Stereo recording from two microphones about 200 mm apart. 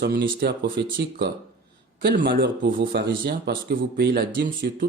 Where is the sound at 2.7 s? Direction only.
45° right (ahead or behind).